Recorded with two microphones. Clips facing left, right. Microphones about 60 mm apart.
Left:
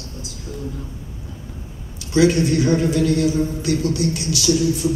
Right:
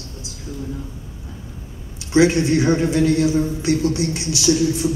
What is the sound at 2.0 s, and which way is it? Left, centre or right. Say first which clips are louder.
A woman's voice: right 1 dB; right.